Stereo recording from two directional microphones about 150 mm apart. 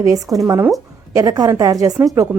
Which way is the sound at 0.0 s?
20° right (ahead or behind).